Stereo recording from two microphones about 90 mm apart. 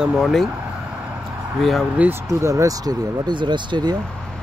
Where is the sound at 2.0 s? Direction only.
15° right (ahead or behind).